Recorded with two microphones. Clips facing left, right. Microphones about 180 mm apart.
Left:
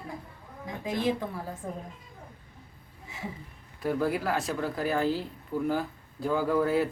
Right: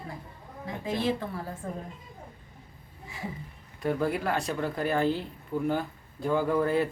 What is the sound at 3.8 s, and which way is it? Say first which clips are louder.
Speech: even; centre (ahead or behind).